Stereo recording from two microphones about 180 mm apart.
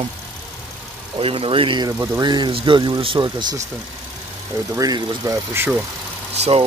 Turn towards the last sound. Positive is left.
turn(degrees=-35)  # may be behind; listen again after turning